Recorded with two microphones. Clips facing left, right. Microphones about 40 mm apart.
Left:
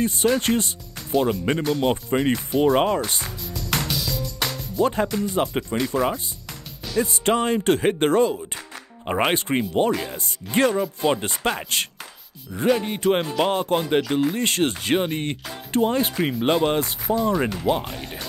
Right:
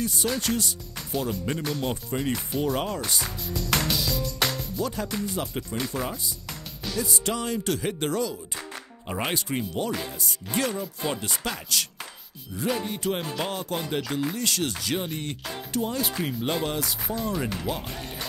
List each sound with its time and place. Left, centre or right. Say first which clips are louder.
0.0 s speech: left 7 dB; left
3.3 s music: even; centre
5.3 s speech: left 7 dB; left
17.1 s speech: left 9 dB; centre
17.4 s speech: left 7 dB; left